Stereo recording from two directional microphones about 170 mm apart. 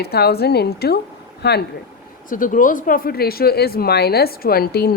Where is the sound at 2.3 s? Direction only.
50° left (ahead or behind).